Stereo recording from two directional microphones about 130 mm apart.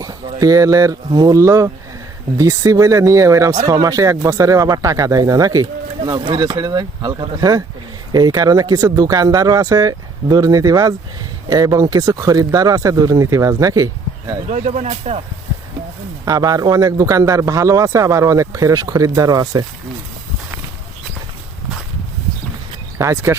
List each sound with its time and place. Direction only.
0.3 s a man's voice: 25° right (ahead or behind)
14.5 s speech: 65° right (ahead or behind)
16.2 s a man's voice: 30° right (ahead or behind)
23.0 s a man's voice: 20° right (ahead or behind)